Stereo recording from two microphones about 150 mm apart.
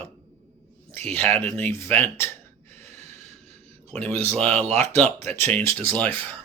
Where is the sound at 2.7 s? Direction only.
50° right (ahead or behind).